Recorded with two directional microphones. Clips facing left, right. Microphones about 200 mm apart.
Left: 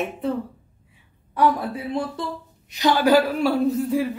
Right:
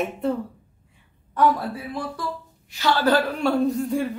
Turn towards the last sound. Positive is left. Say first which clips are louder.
# left 2 dB
turn(degrees=0)  # may be behind; listen again after turning